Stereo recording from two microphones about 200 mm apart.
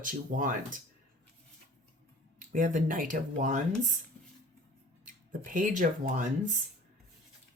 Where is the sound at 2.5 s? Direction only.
40° right (ahead or behind).